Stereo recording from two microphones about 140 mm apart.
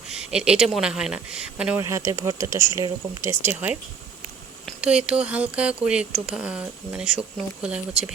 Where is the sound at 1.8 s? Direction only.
20° right (ahead or behind).